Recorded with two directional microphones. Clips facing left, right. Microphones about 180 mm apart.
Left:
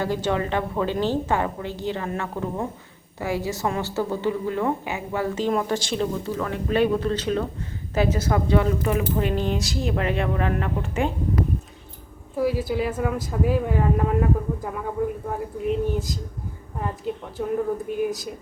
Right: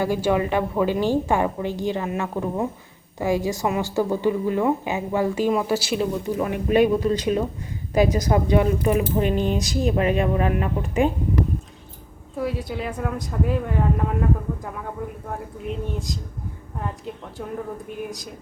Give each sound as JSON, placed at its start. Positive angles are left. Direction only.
{"t": 0.0, "sound": "a woman's voice", "side_deg": -10}
{"t": 12.4, "sound": "speech", "side_deg": 0}